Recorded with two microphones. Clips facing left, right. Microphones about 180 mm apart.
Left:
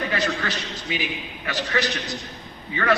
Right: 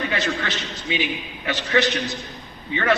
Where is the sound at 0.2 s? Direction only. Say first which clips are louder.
Even; 25° right (ahead or behind).